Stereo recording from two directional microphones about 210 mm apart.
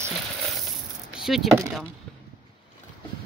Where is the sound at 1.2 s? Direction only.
Centre (ahead or behind).